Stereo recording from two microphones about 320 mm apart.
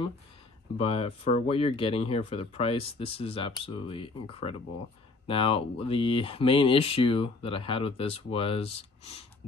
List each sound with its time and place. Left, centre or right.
0.7 s speech: centre